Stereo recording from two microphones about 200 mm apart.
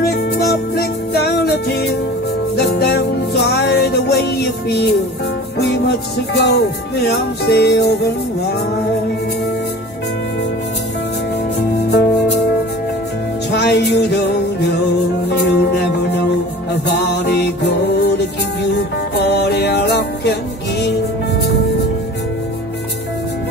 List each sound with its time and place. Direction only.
0.0 s music: 55° left (ahead or behind)
11.9 s music: 55° left (ahead or behind)
13.5 s music: 55° left (ahead or behind)